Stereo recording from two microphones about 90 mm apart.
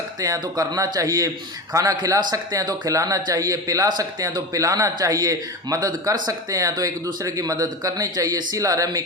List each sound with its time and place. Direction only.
0.2 s speech: 45° right (ahead or behind)
3.8 s speech: 50° right (ahead or behind)